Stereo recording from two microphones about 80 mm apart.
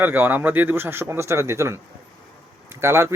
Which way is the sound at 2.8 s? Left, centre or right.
Right.